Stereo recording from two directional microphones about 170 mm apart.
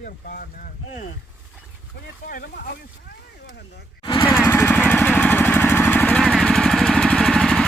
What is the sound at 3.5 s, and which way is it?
Speech, 75° left (ahead or behind).